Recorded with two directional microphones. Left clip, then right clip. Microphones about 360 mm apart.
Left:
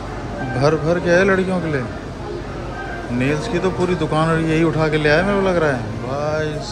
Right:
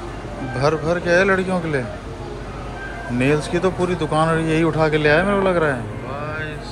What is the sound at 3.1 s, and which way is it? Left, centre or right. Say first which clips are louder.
Speech: right 2 dB; centre.